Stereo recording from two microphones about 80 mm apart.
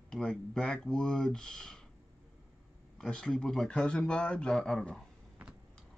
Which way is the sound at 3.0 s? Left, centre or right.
Centre.